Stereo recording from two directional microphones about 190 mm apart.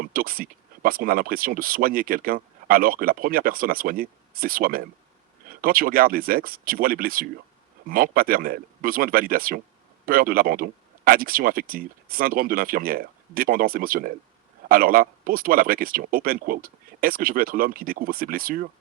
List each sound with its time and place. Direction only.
0.0 s speech: 50° right (ahead or behind)